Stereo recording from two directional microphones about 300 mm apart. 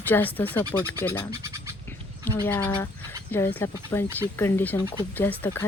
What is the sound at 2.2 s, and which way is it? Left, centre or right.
A woman's voice, centre.